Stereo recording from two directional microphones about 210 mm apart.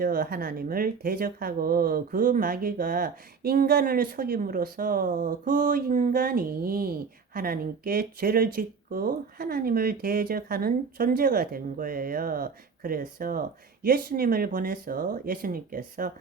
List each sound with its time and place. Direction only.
0.0 s speech: 45° right (ahead or behind)